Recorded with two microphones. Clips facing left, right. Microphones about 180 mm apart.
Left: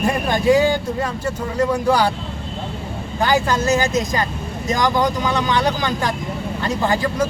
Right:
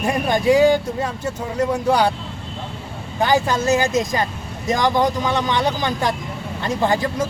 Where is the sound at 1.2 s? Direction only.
Centre (ahead or behind).